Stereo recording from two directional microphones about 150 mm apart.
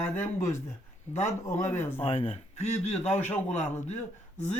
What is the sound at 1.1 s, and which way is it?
Speech, 50° left (ahead or behind).